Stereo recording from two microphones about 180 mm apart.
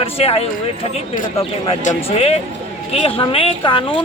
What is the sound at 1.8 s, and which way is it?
A man's voice, 40° left (ahead or behind).